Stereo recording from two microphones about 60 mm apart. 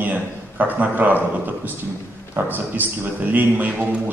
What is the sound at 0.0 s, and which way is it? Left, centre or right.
A man's voice, right.